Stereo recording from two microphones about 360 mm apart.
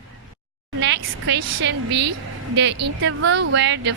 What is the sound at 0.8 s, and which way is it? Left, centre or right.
A woman's voice, right.